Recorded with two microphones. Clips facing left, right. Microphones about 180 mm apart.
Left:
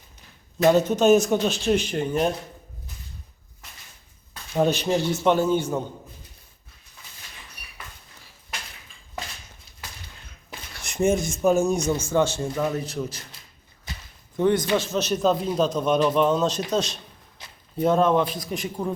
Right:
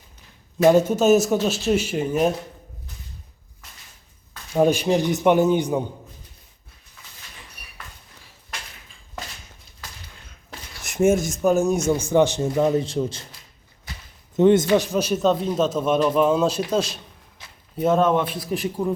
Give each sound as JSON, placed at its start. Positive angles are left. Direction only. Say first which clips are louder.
{"t": 0.6, "sound": "speech", "louder": "right 2 dB", "side_deg": -10}
{"t": 4.5, "sound": "a man's voice", "louder": "right 3 dB", "side_deg": -10}
{"t": 10.8, "sound": "a sound", "louder": "right 3 dB", "side_deg": -5}
{"t": 11.3, "sound": "speech", "louder": "right 1 dB", "side_deg": 0}
{"t": 12.0, "sound": "speech", "louder": "right 4 dB", "side_deg": -15}
{"t": 14.3, "sound": "a man's voice", "louder": "right 5 dB", "side_deg": -20}
{"t": 15.2, "sound": "a man's voice", "louder": "even", "side_deg": 0}